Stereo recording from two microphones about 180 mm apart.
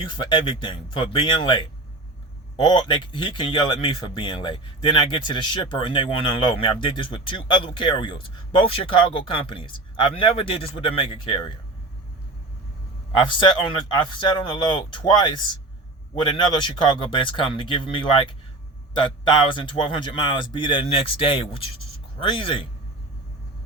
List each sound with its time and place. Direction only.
0.0 s speech: 25° left (ahead or behind)
13.1 s speech: 25° left (ahead or behind)